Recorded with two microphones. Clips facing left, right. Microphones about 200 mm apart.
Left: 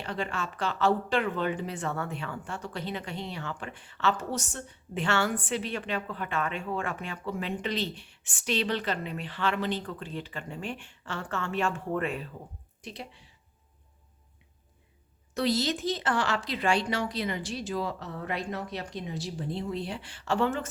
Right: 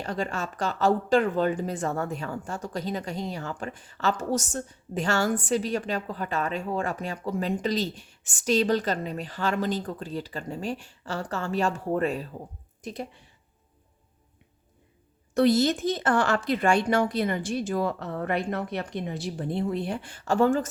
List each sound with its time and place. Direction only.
0.0 s speech: 40° right (ahead or behind)
15.4 s speech: 50° right (ahead or behind)